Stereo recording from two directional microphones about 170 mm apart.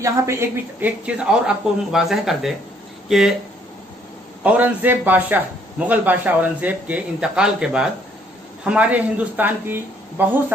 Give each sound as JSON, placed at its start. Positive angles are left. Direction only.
{"t": 0.0, "sound": "speech", "side_deg": -15}
{"t": 4.4, "sound": "a man's voice", "side_deg": -10}